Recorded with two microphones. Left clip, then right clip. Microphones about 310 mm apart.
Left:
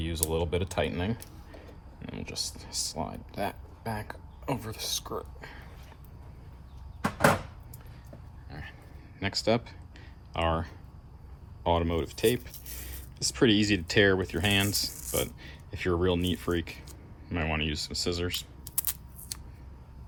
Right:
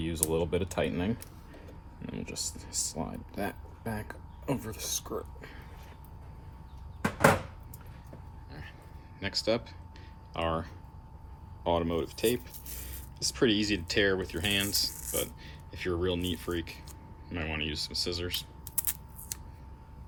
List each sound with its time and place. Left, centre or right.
0.0 s speech: left
8.4 s a sound: left
9.1 s speech: centre